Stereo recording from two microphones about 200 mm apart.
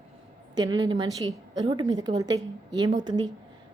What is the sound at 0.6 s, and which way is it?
A woman's voice, 20° right (ahead or behind).